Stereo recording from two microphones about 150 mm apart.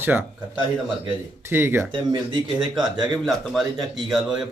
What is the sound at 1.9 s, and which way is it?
Speech, 35° right (ahead or behind).